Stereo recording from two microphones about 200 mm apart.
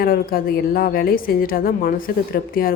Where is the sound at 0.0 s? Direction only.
45° left (ahead or behind).